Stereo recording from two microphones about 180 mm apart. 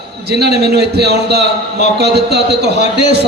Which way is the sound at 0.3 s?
65° right (ahead or behind).